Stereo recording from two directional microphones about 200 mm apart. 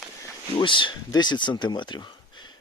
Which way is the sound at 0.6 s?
25° left (ahead or behind).